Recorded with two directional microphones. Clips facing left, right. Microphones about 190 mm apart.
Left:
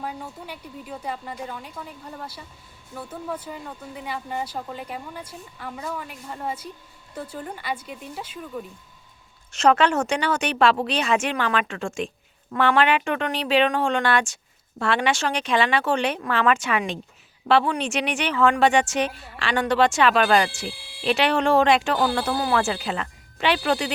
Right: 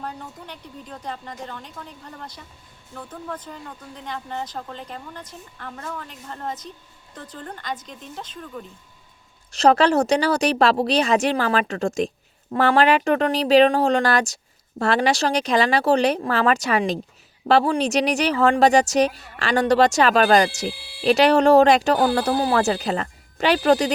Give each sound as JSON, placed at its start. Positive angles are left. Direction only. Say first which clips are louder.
{"t": 0.0, "sound": "speech", "louder": "left 1 dB", "side_deg": 10}
{"t": 9.5, "sound": "a woman's voice", "louder": "right 2 dB", "side_deg": -35}